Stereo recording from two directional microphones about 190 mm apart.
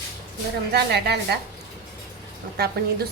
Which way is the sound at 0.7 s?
60° right (ahead or behind).